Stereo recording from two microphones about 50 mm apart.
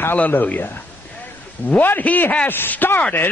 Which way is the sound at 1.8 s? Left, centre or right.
Left.